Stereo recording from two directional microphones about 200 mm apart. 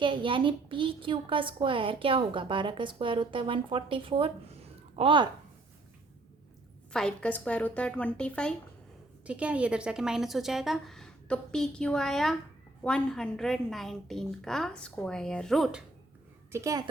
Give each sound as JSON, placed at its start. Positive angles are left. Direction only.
{"t": 0.0, "sound": "a woman's voice", "side_deg": -25}
{"t": 6.9, "sound": "a woman's voice", "side_deg": 5}
{"t": 9.2, "sound": "a woman's voice", "side_deg": -5}
{"t": 16.5, "sound": "a woman's voice", "side_deg": -15}